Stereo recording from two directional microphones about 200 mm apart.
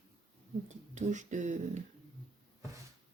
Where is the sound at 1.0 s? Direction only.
35° right (ahead or behind).